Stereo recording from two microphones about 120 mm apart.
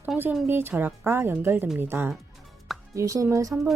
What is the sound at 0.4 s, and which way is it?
Speech, 20° right (ahead or behind).